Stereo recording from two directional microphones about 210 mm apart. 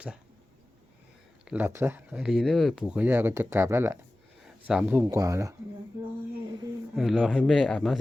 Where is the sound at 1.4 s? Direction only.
10° right (ahead or behind).